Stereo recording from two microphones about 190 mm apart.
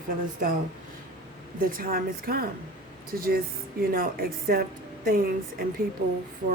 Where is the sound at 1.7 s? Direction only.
50° right (ahead or behind).